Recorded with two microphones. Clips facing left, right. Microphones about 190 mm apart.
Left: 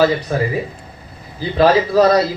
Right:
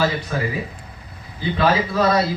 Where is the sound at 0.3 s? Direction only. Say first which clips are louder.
Left 5 dB; 30° left (ahead or behind).